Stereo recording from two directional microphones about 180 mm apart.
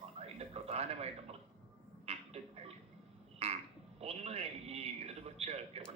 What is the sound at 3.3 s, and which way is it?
Frog, 35° right (ahead or behind).